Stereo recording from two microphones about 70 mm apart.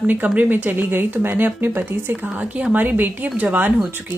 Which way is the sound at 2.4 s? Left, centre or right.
Centre.